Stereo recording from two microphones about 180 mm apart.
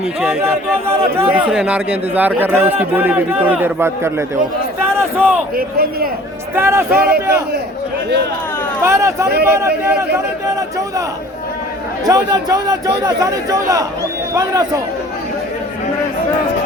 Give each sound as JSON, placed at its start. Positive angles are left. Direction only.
{"t": 0.2, "sound": "a man's voice", "side_deg": -10}
{"t": 5.5, "sound": "a man's voice", "side_deg": -55}
{"t": 6.6, "sound": "a man's voice", "side_deg": -15}
{"t": 6.9, "sound": "a man's voice", "side_deg": -55}
{"t": 8.8, "sound": "a man's voice", "side_deg": -15}
{"t": 12.0, "sound": "speech", "side_deg": -20}